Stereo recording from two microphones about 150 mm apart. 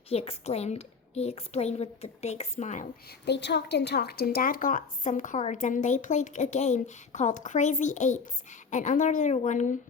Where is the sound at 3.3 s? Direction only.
90° left.